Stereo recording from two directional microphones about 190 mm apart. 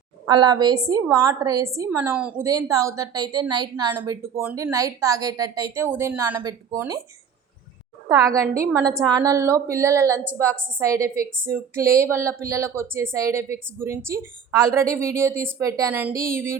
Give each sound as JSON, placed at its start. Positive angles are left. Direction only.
{"t": 0.3, "sound": "a woman's voice", "side_deg": -20}
{"t": 8.0, "sound": "a woman's voice", "side_deg": -15}